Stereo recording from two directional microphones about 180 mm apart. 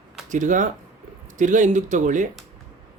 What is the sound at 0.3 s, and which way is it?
Speech, 45° right (ahead or behind).